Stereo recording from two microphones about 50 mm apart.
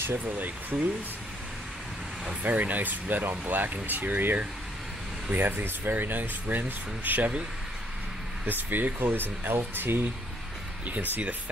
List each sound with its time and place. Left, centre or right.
0.4 s speech: right
2.4 s speech: right
7.1 s speech: right
8.5 s speech: right
10.9 s speech: right